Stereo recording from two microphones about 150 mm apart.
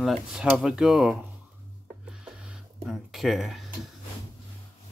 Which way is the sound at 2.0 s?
5° right (ahead or behind).